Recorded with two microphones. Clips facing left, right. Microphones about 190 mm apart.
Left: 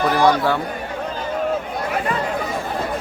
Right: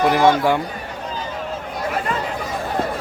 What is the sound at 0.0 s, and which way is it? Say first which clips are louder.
Speech: right 1 dB; 20° right (ahead or behind).